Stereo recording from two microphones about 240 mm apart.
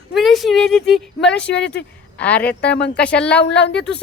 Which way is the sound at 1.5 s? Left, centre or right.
Left.